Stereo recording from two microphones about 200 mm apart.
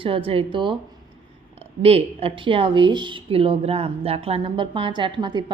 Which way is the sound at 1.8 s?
30° right (ahead or behind).